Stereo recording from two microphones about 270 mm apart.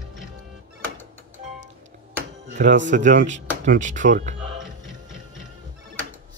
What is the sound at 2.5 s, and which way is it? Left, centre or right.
Speech, right.